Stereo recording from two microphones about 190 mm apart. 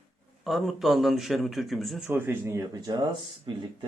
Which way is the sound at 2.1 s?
10° right (ahead or behind).